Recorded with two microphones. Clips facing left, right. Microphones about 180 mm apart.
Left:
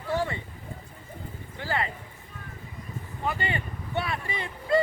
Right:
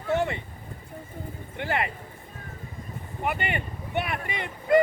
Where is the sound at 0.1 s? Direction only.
20° right (ahead or behind).